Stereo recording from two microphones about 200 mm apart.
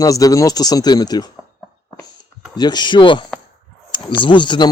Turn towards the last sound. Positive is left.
turn(degrees=20)  # may be behind; listen again after turning